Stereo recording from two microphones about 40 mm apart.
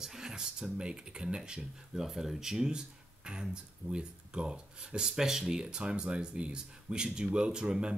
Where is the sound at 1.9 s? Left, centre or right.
Centre; by 5.1 s right.